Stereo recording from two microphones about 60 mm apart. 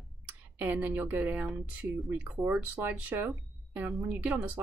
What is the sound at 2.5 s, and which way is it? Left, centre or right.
A woman's voice, centre.